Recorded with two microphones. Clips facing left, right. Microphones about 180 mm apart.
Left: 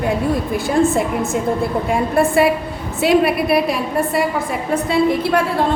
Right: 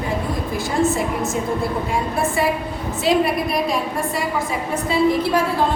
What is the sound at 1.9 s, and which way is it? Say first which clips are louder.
A woman's voice: left 6 dB; 60° left (ahead or behind).